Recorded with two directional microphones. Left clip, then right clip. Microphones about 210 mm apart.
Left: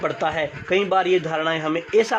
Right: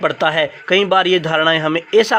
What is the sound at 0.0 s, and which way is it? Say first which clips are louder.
Speech: right 7 dB; 25° right (ahead or behind).